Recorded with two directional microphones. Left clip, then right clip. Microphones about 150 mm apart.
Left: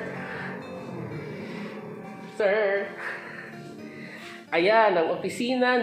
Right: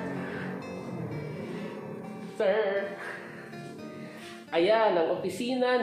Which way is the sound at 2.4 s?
90° left.